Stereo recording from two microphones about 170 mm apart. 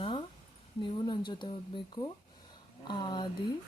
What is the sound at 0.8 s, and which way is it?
Speech, 25° left (ahead or behind).